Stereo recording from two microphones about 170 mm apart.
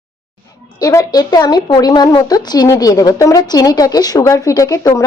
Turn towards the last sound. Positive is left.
turn(degrees=20)  # may be behind; listen again after turning